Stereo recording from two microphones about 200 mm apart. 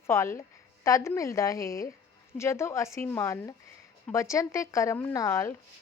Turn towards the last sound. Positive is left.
turn(degrees=15)  # may be behind; listen again after turning